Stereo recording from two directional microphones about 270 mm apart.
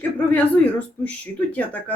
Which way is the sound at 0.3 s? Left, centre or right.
Centre.